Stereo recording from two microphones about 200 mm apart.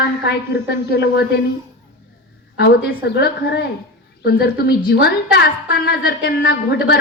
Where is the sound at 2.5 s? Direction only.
55° left (ahead or behind).